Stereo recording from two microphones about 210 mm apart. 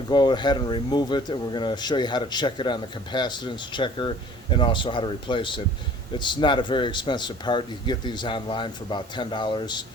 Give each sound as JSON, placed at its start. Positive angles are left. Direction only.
{"t": 0.1, "sound": "speech", "side_deg": 20}